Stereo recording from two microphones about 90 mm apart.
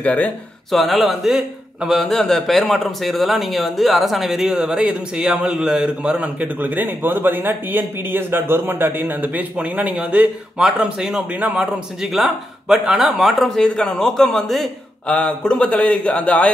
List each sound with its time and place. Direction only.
0.0 s a man's voice: 15° left (ahead or behind)
0.7 s speech: centre (ahead or behind)
11.3 s speech: 15° right (ahead or behind)
12.0 s speech: 5° right (ahead or behind)
15.0 s a man's voice: 15° left (ahead or behind)